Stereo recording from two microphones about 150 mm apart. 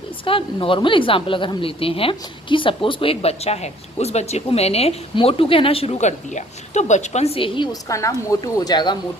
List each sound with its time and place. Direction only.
0.3 s a woman's voice: 35° left (ahead or behind)